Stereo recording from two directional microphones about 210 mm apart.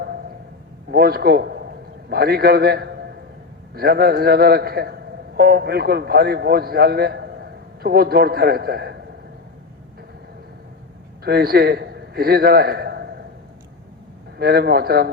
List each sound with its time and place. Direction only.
0.9 s a man's voice: 50° right (ahead or behind)
11.2 s a man's voice: 50° right (ahead or behind)
14.3 s a man's voice: 50° right (ahead or behind)